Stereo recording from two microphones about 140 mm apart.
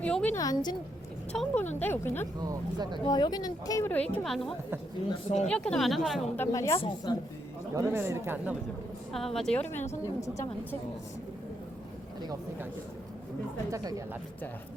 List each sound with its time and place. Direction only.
0.0 s speech: 10° left (ahead or behind)
0.3 s speech: 25° left (ahead or behind)
1.3 s speech: 10° left (ahead or behind)
2.4 s speech: 30° right (ahead or behind)
3.0 s speech: 30° left (ahead or behind)
3.8 s speech: 10° left (ahead or behind)
6.3 s speech: 20° left (ahead or behind)
6.7 s a woman's voice: 35° left (ahead or behind)
7.8 s speech: 15° right (ahead or behind)
9.1 s speech: centre (ahead or behind); by 10.3 s 20° left (ahead or behind)
13.7 s speech: 25° right (ahead or behind)